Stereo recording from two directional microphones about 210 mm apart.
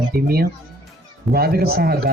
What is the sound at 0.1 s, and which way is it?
Speech, 45° right (ahead or behind).